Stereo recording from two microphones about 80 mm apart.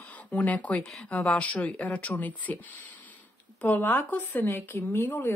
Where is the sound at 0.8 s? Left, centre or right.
Centre.